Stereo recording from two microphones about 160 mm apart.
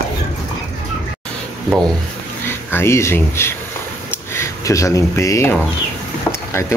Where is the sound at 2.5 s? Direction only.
15° left (ahead or behind).